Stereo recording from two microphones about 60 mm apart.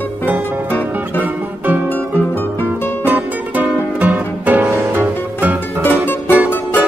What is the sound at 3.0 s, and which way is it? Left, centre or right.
Music, right.